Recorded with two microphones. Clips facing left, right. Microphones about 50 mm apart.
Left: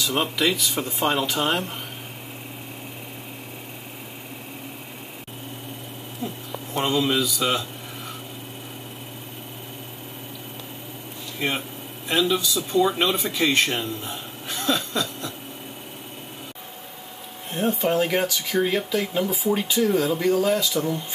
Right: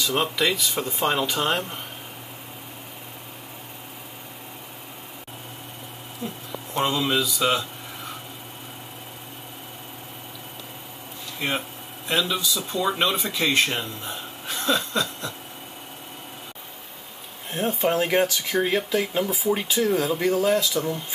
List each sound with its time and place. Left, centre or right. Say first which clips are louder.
0.0 s speech: even; centre
6.9 s speech: left 4 dB; centre
11.3 s speech: left 1 dB; centre
14.0 s a sound: even; centre
14.7 s a sound: right 1 dB; centre
17.5 s speech: left 1 dB; centre